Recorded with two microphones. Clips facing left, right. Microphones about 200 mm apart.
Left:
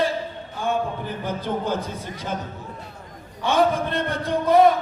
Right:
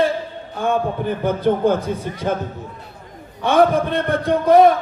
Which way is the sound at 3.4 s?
55° right (ahead or behind).